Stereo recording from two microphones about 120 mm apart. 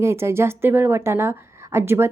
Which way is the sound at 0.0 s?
20° right (ahead or behind).